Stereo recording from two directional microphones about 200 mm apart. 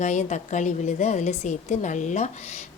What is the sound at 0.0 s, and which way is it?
A woman's voice, 35° left (ahead or behind).